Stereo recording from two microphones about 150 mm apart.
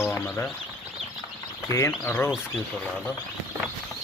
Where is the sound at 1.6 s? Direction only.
20° left (ahead or behind).